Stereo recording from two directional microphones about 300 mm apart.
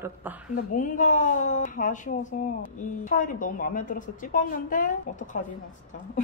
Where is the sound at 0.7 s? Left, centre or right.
Left.